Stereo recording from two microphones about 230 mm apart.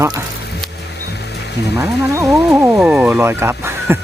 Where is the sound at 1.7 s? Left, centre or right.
Centre.